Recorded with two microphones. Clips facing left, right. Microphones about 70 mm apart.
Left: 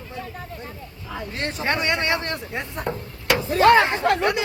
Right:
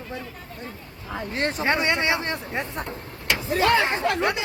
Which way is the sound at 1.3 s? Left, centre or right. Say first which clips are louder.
Right 4 dB; right.